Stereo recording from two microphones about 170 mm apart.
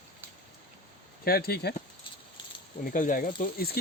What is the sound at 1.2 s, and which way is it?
Speech, 65° left (ahead or behind).